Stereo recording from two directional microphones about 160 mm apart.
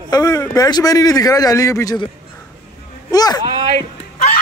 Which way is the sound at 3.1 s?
25° left (ahead or behind).